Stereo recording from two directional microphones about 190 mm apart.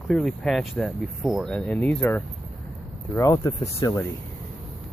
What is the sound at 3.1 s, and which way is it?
Speech, 20° left (ahead or behind).